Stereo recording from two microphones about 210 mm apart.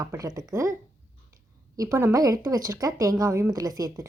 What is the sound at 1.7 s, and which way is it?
Speech, 15° right (ahead or behind).